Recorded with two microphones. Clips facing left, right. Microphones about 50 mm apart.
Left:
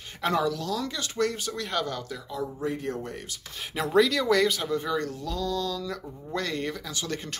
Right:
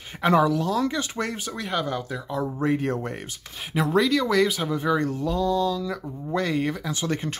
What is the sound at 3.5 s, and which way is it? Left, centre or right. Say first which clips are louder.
Speech: even; centre.